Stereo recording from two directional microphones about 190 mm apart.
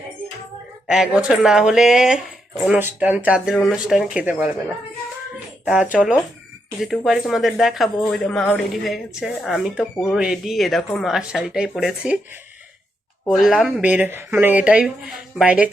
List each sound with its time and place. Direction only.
0.9 s speech: 5° right (ahead or behind)
5.6 s speech: 5° right (ahead or behind)
13.2 s speech: centre (ahead or behind)